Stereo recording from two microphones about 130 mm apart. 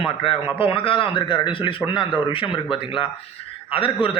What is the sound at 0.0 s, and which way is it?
A man's voice, 45° left (ahead or behind).